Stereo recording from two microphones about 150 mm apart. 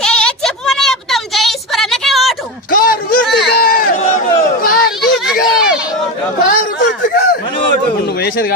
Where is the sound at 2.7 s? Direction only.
75° left (ahead or behind).